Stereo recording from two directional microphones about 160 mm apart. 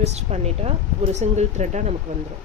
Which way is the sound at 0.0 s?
45° right (ahead or behind).